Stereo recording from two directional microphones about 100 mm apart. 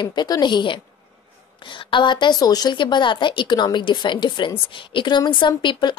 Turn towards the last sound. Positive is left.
turn(degrees=50)  # may be behind; listen again after turning